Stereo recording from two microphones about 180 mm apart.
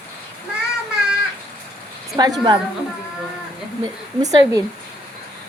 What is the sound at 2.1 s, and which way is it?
Speech, 20° right (ahead or behind).